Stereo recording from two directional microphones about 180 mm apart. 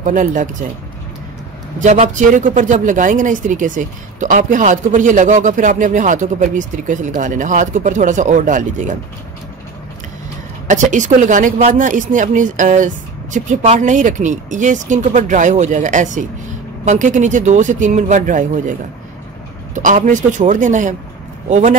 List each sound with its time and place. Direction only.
0.0 s a woman's voice: 45° right (ahead or behind)
1.8 s a woman's voice: 45° right (ahead or behind)
10.7 s a woman's voice: 45° right (ahead or behind)